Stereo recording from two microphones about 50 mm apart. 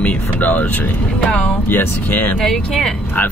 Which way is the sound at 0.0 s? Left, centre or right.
Left.